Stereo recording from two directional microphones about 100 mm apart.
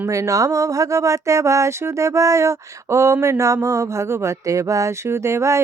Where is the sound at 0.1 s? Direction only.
30° right (ahead or behind).